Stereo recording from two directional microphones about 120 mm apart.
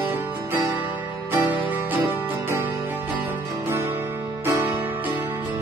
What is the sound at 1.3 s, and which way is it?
Music, 20° right (ahead or behind).